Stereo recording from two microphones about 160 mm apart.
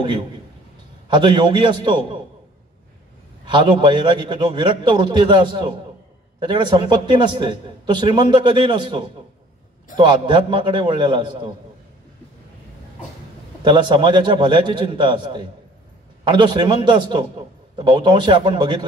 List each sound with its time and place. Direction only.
1.0 s a man's voice: 30° right (ahead or behind)
3.4 s a man's voice: 30° right (ahead or behind)
13.7 s a man's voice: 30° right (ahead or behind)